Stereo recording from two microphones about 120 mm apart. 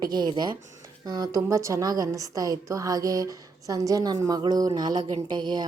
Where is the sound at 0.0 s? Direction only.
35° right (ahead or behind).